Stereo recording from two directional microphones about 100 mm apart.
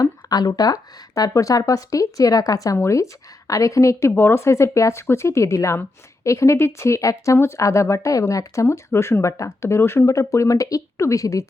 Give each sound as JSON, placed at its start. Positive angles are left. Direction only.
{"t": 0.0, "sound": "speech", "side_deg": 40}